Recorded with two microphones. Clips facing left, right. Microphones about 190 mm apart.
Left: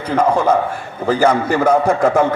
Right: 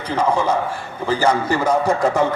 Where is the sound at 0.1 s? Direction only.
55° left (ahead or behind).